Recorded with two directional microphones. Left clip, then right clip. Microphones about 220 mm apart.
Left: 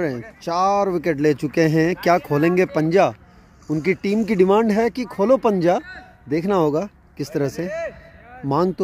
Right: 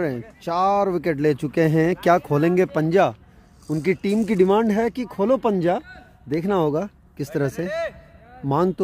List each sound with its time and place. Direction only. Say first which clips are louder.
0.4 s speech: left 1 dB; centre (ahead or behind)
7.5 s a man's voice: even; 20° right (ahead or behind)
8.4 s speech: left 1 dB; centre (ahead or behind)